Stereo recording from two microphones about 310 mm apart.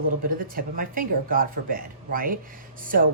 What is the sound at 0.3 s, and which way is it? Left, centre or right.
A woman's voice, right.